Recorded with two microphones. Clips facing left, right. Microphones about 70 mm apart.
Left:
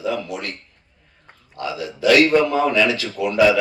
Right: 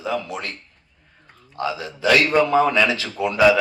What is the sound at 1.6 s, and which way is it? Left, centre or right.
Speech, right.